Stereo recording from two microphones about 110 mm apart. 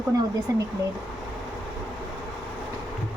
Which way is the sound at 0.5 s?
30° right (ahead or behind).